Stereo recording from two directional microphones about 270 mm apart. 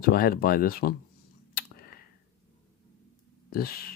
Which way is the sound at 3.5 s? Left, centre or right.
Left.